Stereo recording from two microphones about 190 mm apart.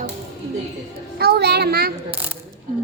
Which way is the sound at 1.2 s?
55° right (ahead or behind).